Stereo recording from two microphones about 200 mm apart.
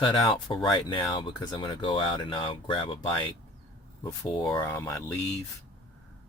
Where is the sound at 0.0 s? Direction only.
20° left (ahead or behind).